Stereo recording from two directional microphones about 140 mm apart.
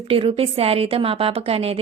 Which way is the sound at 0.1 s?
40° right (ahead or behind).